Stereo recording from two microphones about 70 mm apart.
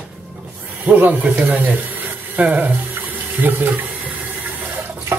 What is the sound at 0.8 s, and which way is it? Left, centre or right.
Speech, right.